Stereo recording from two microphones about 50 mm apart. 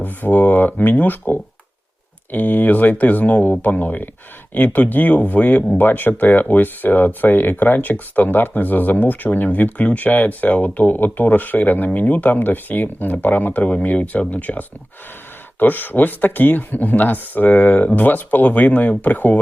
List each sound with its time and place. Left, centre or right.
0.0 s speech: left
2.3 s speech: left